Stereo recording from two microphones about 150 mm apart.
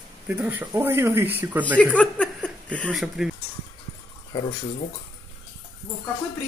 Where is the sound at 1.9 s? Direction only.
10° left (ahead or behind).